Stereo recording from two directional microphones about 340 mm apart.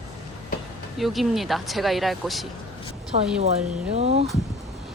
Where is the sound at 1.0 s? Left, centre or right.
Centre.